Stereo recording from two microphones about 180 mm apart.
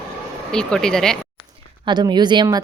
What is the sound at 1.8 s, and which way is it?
Speech, 25° right (ahead or behind).